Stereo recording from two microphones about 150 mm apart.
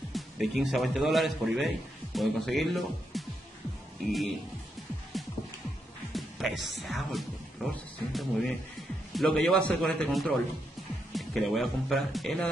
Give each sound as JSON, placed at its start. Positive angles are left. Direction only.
{"t": 0.1, "sound": "speech", "side_deg": 0}
{"t": 5.1, "sound": "music", "side_deg": 0}
{"t": 6.1, "sound": "speech", "side_deg": 0}